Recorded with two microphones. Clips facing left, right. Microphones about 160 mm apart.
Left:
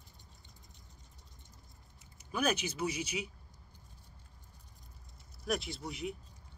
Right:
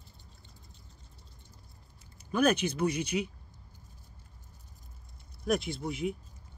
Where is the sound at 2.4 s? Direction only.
55° right (ahead or behind).